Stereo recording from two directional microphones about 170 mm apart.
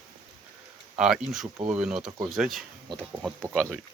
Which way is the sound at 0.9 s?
5° right (ahead or behind).